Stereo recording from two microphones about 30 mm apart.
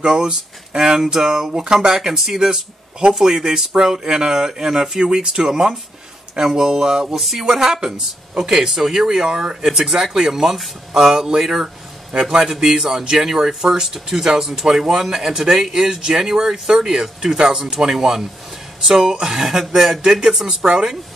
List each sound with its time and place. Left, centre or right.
0.0 s speech: right
1.6 s speech: right
1.9 s speech: centre
9.3 s speech: right
9.7 s speech: centre
14.2 s speech: centre
18.9 s speech: right